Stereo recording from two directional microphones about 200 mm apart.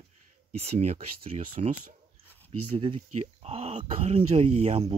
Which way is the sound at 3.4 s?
30° right (ahead or behind).